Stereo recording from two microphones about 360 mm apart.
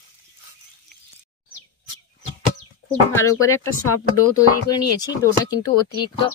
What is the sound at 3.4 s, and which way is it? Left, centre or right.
Speech, left.